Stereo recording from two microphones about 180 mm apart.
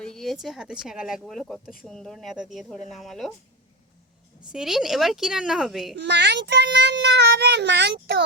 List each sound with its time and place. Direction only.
0.0 s a sound: centre (ahead or behind)
0.4 s speech: 5° right (ahead or behind)
4.5 s speech: centre (ahead or behind)
6.0 s a child's voice: 70° right (ahead or behind)